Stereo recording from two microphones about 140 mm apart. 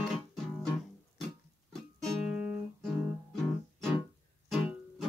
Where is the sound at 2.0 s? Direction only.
5° right (ahead or behind).